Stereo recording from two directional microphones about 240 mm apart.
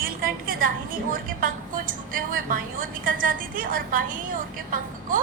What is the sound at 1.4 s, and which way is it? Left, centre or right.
A woman's voice, right.